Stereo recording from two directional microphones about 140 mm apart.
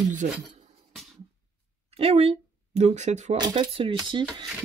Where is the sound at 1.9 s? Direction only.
45° right (ahead or behind).